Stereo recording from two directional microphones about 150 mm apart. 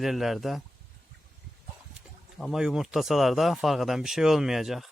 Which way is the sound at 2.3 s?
Centre (ahead or behind).